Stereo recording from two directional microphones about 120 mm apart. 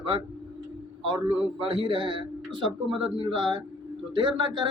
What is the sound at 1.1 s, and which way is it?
Speech, 45° right (ahead or behind).